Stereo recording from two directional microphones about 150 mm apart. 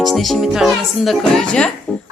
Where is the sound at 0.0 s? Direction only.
Centre (ahead or behind).